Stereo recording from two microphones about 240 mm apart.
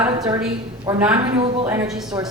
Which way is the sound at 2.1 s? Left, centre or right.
Centre.